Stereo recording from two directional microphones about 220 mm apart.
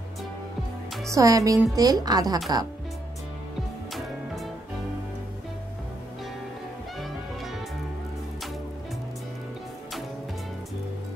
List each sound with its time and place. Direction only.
1.1 s speech: 15° right (ahead or behind)